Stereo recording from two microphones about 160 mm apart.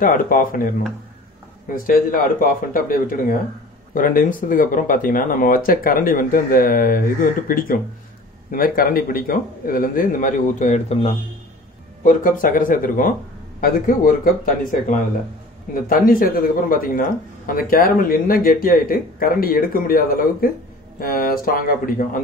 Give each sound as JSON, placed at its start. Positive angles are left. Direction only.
{"t": 0.0, "sound": "speech", "side_deg": 60}
{"t": 1.8, "sound": "speech", "side_deg": 60}
{"t": 12.0, "sound": "speech", "side_deg": 55}